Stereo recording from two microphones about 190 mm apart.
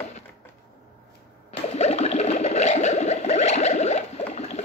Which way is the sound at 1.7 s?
35° left (ahead or behind).